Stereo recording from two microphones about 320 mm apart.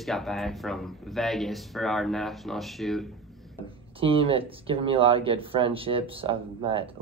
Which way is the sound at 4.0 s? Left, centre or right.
Centre.